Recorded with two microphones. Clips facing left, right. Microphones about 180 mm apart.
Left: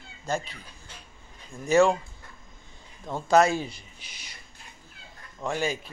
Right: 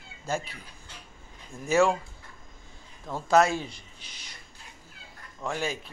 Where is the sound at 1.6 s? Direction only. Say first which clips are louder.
Left 3 dB; 5° right (ahead or behind).